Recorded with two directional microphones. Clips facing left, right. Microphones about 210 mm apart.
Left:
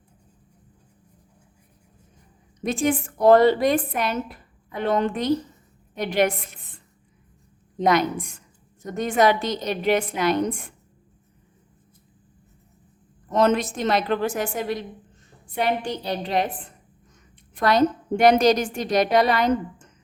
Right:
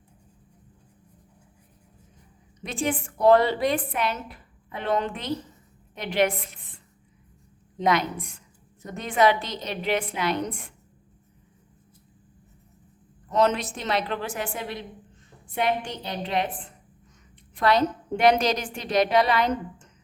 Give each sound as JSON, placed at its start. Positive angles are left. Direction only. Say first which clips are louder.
{"t": 2.6, "sound": "a woman's voice", "louder": "left 5 dB", "side_deg": 45}
{"t": 7.8, "sound": "a woman's voice", "louder": "left 4 dB", "side_deg": 45}
{"t": 13.3, "sound": "a woman's voice", "louder": "left 3 dB", "side_deg": 50}
{"t": 17.5, "sound": "a woman's voice", "louder": "left 3 dB", "side_deg": 45}